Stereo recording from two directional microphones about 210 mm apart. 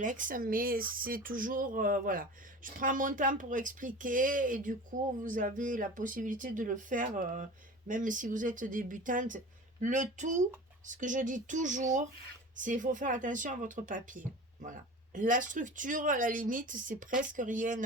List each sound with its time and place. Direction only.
0.0 s speech: 40° right (ahead or behind)